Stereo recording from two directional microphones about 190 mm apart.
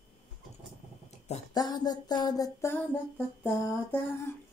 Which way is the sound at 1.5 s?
20° left (ahead or behind).